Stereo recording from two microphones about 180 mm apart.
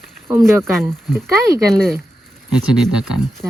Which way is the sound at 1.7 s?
Centre (ahead or behind).